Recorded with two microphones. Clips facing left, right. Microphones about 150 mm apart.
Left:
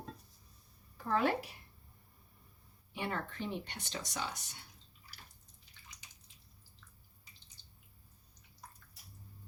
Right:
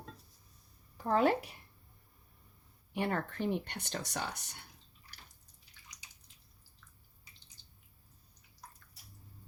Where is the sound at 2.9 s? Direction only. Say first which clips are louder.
Right 5 dB; 55° right (ahead or behind).